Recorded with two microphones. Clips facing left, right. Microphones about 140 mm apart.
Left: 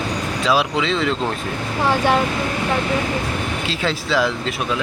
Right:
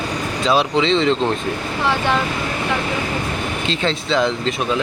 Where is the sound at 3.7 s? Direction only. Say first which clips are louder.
Right 2 dB; 5° left (ahead or behind).